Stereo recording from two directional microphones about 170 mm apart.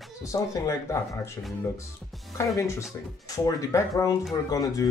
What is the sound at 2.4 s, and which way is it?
Speech, 15° left (ahead or behind).